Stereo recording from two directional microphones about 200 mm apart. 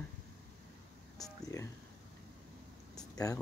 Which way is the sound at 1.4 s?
15° left (ahead or behind).